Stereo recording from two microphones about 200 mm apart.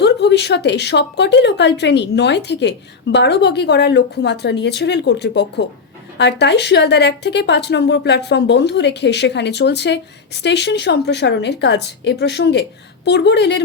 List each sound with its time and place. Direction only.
0.0 s speech: 60° left (ahead or behind)